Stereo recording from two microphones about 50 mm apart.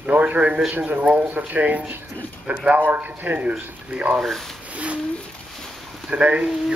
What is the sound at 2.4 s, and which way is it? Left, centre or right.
Speech, centre.